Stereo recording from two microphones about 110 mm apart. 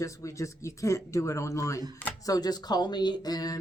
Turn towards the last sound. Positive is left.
turn(degrees=35)  # may be behind; listen again after turning